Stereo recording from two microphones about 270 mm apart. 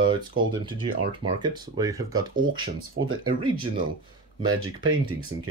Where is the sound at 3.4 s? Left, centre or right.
Centre.